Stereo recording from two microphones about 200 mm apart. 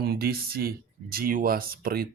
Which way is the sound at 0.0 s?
50° right (ahead or behind).